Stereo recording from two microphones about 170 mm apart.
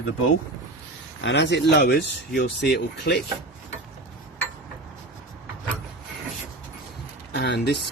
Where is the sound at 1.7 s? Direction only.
75° left (ahead or behind).